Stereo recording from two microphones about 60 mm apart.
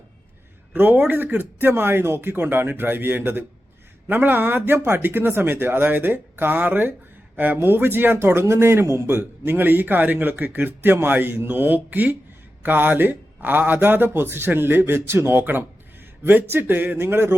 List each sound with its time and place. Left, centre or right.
0.7 s a man's voice: right